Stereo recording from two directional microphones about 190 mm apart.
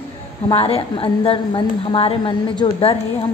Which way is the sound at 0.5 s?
30° left (ahead or behind).